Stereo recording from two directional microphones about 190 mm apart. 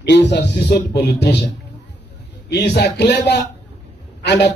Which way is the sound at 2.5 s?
60° left (ahead or behind).